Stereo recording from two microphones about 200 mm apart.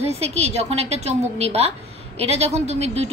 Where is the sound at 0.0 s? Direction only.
30° right (ahead or behind).